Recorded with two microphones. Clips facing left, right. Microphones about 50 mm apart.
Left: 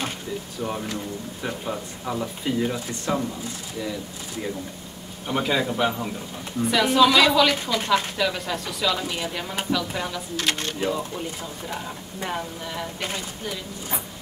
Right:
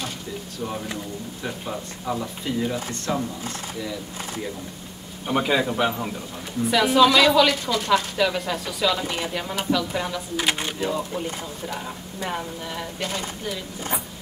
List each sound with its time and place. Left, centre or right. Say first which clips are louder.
0.6 s speech: left 1 dB; centre
5.2 s a man's voice: right 2 dB; centre
7.7 s speech: right 1 dB; centre
8.2 s speech: right 2 dB; centre
10.3 s a man's voice: right 2 dB; centre
10.9 s speech: right 1 dB; centre